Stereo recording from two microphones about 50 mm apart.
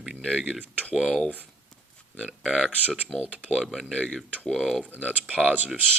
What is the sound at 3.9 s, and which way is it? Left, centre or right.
Speech, centre.